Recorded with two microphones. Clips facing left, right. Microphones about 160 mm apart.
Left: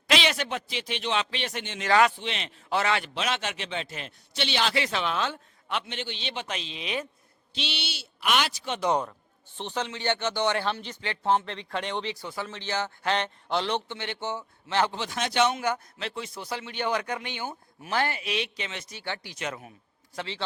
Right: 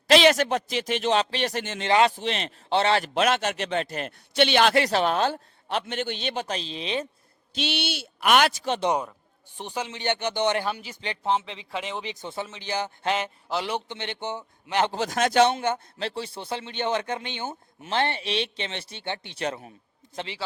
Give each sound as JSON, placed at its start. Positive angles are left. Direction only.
{"t": 0.1, "sound": "a man's voice", "side_deg": -45}
{"t": 1.8, "sound": "speech", "side_deg": -25}
{"t": 2.1, "sound": "a man's voice", "side_deg": -40}
{"t": 2.6, "sound": "a man's voice", "side_deg": -30}
{"t": 3.2, "sound": "a man's voice", "side_deg": -50}
{"t": 7.5, "sound": "a man's voice", "side_deg": -50}
{"t": 8.9, "sound": "a man's voice", "side_deg": -10}
{"t": 11.2, "sound": "speech", "side_deg": 0}
{"t": 12.0, "sound": "a man's voice", "side_deg": -20}
{"t": 14.9, "sound": "a man's voice", "side_deg": -45}
{"t": 15.4, "sound": "speech", "side_deg": -30}
{"t": 20.1, "sound": "a man's voice", "side_deg": -15}